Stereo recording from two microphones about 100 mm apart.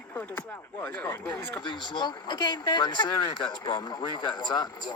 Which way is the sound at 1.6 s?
50° left (ahead or behind).